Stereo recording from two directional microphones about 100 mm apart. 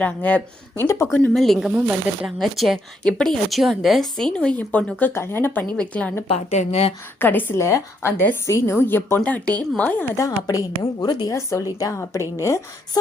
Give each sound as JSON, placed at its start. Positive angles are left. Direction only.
{"t": 0.0, "sound": "a woman's voice", "side_deg": 15}
{"t": 0.9, "sound": "a woman's voice", "side_deg": 30}
{"t": 1.3, "sound": "a woman's voice", "side_deg": 0}
{"t": 5.7, "sound": "a woman's voice", "side_deg": 10}
{"t": 6.2, "sound": "a woman's voice", "side_deg": 90}
{"t": 7.2, "sound": "a woman's voice", "side_deg": 20}
{"t": 10.2, "sound": "a woman's voice", "side_deg": 35}